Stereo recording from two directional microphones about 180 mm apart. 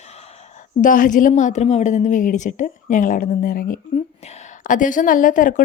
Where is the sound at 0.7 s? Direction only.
50° left (ahead or behind).